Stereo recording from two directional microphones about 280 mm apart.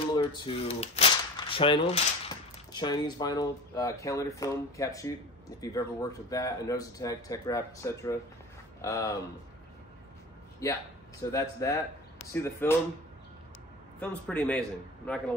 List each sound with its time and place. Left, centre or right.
0.0 s speech: centre
11.3 s speech: centre
13.9 s a man's voice: centre